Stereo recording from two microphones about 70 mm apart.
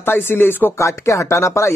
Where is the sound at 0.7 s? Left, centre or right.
Left.